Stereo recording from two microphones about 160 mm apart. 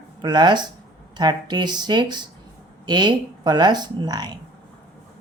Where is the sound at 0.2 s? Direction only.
30° right (ahead or behind).